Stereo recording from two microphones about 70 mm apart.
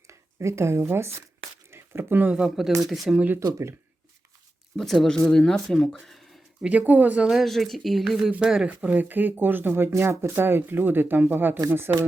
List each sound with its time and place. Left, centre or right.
0.1 s speech: right
1.7 s a sound: right
2.3 s speech: centre
3.4 s speech: right
4.8 s speech: centre
6.6 s speech: centre
7.3 s speech: centre
8.6 s speech: centre